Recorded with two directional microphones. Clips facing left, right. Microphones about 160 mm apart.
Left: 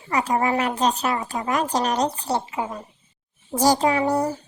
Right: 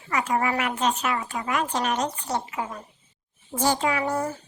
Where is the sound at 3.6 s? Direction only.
35° left (ahead or behind).